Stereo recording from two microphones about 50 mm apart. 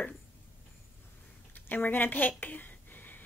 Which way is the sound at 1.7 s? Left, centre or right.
Left.